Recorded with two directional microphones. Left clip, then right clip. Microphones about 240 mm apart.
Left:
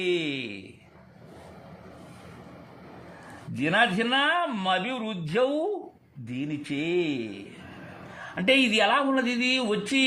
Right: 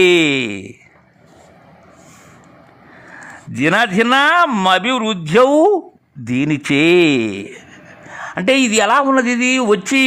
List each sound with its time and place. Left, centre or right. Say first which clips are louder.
0.0 s speech: right 16 dB; right
3.6 s a man's voice: right 10 dB; right